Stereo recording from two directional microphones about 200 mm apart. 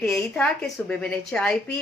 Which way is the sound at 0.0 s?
Centre (ahead or behind).